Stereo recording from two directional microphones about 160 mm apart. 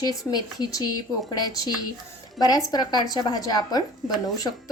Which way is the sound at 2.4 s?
25° left (ahead or behind).